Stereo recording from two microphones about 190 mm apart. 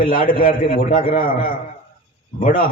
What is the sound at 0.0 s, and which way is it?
A man's voice, 50° left (ahead or behind).